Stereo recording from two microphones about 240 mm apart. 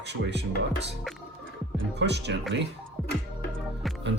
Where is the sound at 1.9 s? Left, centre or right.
Right.